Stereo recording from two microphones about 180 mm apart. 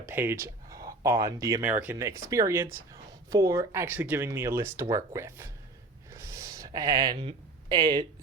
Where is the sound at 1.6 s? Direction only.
10° right (ahead or behind).